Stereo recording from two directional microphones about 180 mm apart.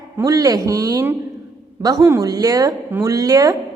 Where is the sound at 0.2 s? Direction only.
20° right (ahead or behind).